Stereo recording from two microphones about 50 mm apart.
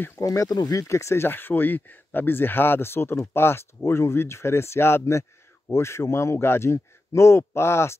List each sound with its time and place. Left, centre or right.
0.1 s speech: left
6.3 s speech: left